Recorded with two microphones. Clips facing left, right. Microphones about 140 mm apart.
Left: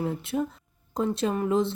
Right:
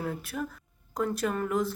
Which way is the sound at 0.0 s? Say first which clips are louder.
Left 5 dB; 25° left (ahead or behind).